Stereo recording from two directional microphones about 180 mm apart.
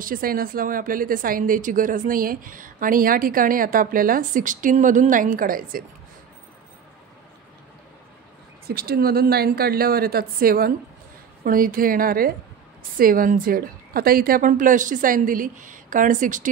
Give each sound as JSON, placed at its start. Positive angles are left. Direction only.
{"t": 0.0, "sound": "a woman's voice", "side_deg": -50}
{"t": 8.6, "sound": "a woman's voice", "side_deg": -60}